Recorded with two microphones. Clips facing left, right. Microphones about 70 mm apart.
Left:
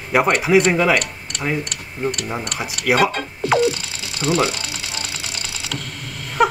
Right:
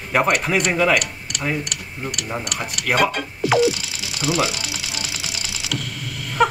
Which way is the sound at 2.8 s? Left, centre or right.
Centre.